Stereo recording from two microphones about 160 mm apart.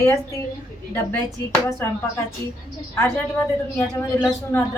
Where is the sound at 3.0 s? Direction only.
15° left (ahead or behind).